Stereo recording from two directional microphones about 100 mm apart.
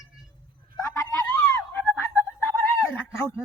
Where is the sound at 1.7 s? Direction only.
20° left (ahead or behind).